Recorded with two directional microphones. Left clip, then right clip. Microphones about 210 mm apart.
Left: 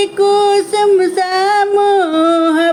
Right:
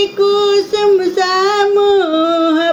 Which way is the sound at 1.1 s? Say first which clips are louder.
Even; 15° left (ahead or behind).